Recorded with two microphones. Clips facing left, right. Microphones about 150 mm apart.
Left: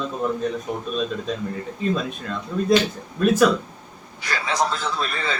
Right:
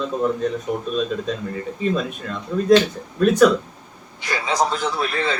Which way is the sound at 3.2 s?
5° left (ahead or behind).